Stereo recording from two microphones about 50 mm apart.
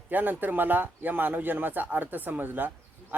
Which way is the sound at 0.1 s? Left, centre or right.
Right.